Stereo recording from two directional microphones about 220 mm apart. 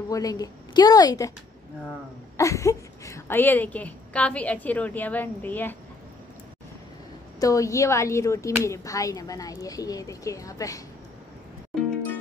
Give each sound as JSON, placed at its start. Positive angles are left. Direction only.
{"t": 0.1, "sound": "a woman's voice", "side_deg": 15}
{"t": 2.3, "sound": "a woman's voice", "side_deg": 15}
{"t": 7.3, "sound": "a woman's voice", "side_deg": 15}